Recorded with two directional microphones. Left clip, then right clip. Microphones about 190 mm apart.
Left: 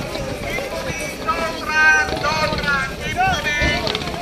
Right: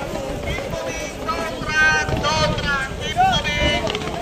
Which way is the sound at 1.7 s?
25° left (ahead or behind).